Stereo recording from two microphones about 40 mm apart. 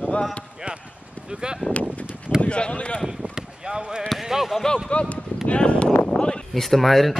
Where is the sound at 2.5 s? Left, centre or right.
Left.